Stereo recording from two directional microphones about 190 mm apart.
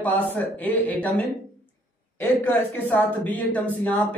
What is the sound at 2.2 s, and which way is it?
A man's voice, 10° left (ahead or behind).